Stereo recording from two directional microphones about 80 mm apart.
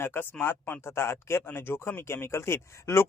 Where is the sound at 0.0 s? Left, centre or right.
Left.